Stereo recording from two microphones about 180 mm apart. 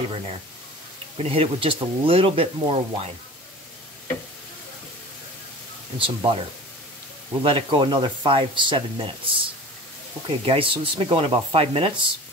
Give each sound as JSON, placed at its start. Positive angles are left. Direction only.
{"t": 1.1, "sound": "speech", "side_deg": -35}
{"t": 5.9, "sound": "speech", "side_deg": -30}
{"t": 7.4, "sound": "speech", "side_deg": -30}